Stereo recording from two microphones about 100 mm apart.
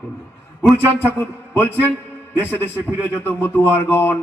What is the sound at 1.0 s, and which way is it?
A man's voice, 20° left (ahead or behind).